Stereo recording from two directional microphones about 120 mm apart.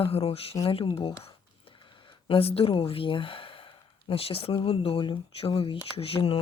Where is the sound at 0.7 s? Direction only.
50° left (ahead or behind).